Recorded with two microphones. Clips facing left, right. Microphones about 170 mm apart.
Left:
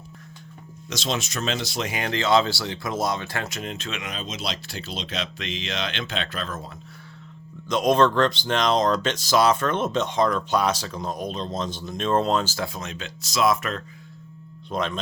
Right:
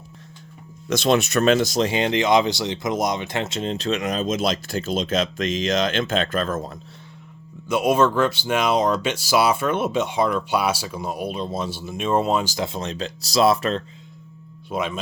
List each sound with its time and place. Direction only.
0.9 s speech: 55° right (ahead or behind)
1.8 s speech: 25° right (ahead or behind); by 6.7 s 45° right (ahead or behind)
7.7 s speech: 5° right (ahead or behind)
12.6 s speech: 30° right (ahead or behind)
14.7 s speech: 10° right (ahead or behind)